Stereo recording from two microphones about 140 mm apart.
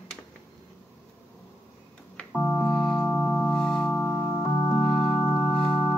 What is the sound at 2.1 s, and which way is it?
Organ, 10° left (ahead or behind).